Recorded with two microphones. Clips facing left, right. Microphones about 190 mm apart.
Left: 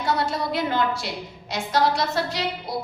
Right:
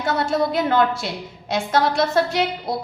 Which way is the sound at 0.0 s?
50° right (ahead or behind).